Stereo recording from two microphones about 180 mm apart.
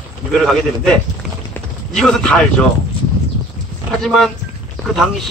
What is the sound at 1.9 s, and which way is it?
Speech, 5° left (ahead or behind).